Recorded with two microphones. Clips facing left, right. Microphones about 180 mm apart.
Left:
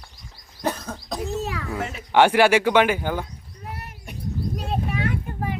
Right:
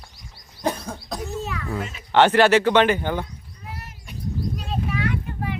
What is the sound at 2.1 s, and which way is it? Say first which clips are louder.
Speech: right 1 dB; 10° left (ahead or behind).